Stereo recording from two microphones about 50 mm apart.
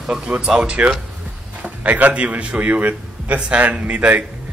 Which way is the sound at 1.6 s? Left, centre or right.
Right.